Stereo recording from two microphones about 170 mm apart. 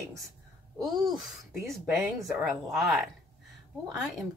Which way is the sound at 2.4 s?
Centre (ahead or behind).